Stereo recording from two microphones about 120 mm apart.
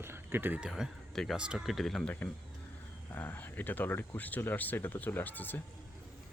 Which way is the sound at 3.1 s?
15° left (ahead or behind).